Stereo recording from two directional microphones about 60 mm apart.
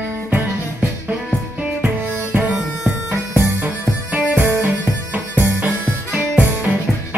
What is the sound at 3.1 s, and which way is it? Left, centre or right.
Bagpipes, right.